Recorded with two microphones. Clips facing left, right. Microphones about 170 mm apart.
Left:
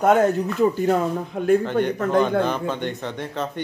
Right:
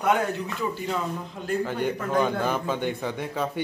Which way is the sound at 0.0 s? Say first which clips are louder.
Left 7 dB; 45° left (ahead or behind).